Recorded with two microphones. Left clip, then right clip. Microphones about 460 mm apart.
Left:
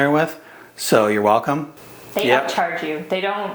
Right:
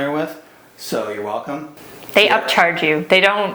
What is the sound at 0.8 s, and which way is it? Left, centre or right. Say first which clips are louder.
Speech: left 7 dB; left.